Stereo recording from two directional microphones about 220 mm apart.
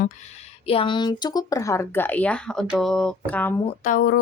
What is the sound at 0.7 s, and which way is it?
Speech, 25° left (ahead or behind).